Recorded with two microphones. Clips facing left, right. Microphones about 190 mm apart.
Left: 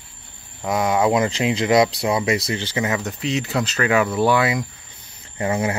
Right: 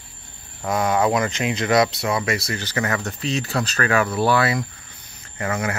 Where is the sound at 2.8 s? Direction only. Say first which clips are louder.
Even; 10° left (ahead or behind).